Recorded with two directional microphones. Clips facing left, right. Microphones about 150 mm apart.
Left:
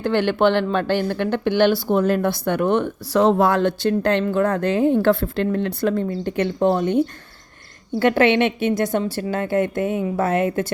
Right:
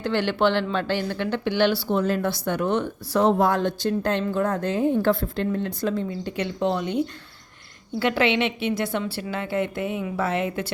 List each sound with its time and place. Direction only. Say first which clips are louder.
0.0 s speech: left 4 dB; 50° left (ahead or behind)
3.1 s speech: left 3 dB; 90° left; by 10.7 s 50° left (ahead or behind)